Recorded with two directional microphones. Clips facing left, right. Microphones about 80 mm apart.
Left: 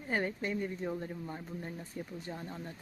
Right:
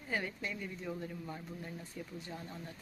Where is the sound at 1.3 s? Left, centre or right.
Left.